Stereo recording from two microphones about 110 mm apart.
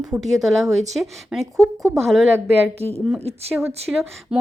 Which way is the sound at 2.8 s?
65° right (ahead or behind).